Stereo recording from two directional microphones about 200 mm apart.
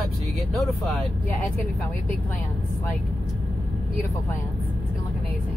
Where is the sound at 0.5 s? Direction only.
Centre (ahead or behind).